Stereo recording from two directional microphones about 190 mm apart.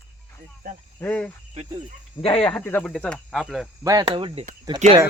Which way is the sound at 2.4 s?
5° left (ahead or behind).